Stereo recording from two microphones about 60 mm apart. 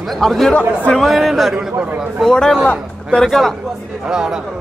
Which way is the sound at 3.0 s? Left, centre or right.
Centre.